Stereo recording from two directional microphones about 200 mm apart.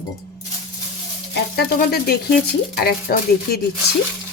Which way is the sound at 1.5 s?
50° left (ahead or behind).